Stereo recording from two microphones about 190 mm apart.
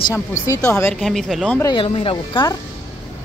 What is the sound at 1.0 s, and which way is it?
Speech, centre (ahead or behind).